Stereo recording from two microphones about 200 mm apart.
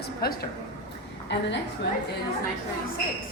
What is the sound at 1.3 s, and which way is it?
Speech, 60° left (ahead or behind).